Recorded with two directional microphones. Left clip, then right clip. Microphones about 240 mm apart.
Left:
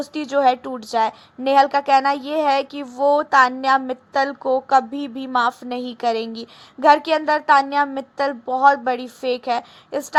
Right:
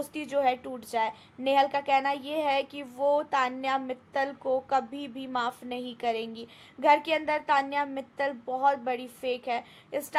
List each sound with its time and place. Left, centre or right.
0.1 s a woman's voice: centre